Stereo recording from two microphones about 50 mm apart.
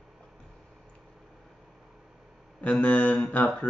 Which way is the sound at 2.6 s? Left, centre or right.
Left.